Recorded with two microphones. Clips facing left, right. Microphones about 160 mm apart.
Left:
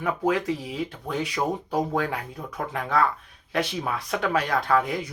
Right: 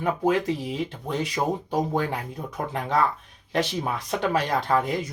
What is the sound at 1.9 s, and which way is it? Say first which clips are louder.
Speech: right 1 dB; 20° right (ahead or behind).